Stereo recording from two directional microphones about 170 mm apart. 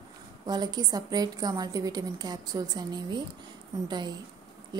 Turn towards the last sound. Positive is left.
turn(degrees=-25)  # may be behind; listen again after turning